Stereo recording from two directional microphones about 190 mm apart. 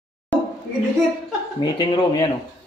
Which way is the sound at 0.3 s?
10° left (ahead or behind).